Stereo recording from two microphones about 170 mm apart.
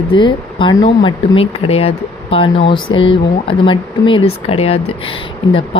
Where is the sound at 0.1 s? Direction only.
30° left (ahead or behind).